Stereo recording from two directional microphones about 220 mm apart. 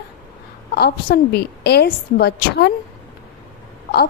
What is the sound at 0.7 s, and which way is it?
A woman's voice, 45° left (ahead or behind).